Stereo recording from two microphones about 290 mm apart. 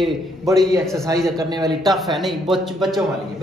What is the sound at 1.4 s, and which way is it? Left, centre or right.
Speech, centre.